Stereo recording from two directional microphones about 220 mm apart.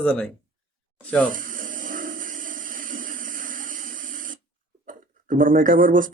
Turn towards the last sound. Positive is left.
turn(degrees=-40)  # may be behind; listen again after turning